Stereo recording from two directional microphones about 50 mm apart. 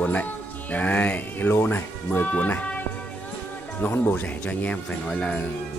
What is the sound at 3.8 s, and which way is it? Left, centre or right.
Speech, left.